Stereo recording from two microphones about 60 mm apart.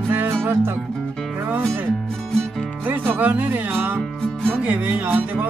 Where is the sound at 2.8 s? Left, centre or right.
Right.